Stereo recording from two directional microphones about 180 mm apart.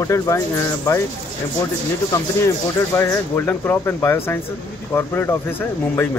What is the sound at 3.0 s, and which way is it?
A man's voice, 15° left (ahead or behind).